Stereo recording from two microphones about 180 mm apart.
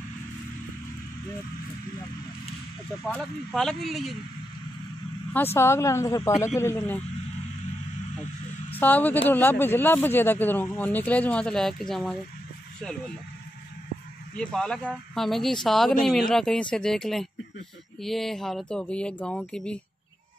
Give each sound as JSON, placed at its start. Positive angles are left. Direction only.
{"t": 3.1, "sound": "speech", "side_deg": 0}
{"t": 5.3, "sound": "speech", "side_deg": 15}
{"t": 8.7, "sound": "speech", "side_deg": 10}
{"t": 14.3, "sound": "speech", "side_deg": 5}